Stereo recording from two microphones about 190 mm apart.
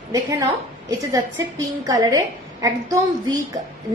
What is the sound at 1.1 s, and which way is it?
A woman's voice, 15° right (ahead or behind).